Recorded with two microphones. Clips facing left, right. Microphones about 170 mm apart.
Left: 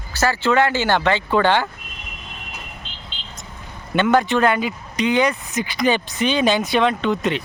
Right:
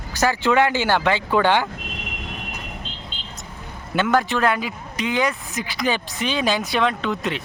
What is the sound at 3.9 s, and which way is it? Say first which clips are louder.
Speech: left 3 dB; centre (ahead or behind).